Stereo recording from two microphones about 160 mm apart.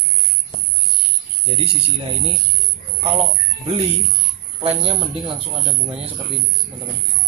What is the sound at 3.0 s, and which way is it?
Speech, 35° right (ahead or behind).